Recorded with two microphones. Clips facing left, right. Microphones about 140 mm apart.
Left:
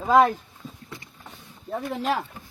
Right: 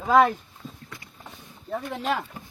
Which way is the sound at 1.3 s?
10° left (ahead or behind).